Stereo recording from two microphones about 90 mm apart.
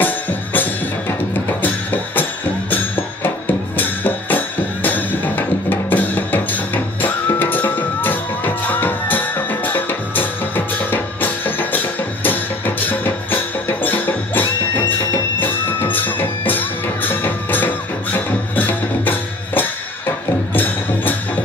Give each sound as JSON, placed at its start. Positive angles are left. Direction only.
{"t": 0.0, "sound": "music", "side_deg": 20}
{"t": 15.4, "sound": "music", "side_deg": 20}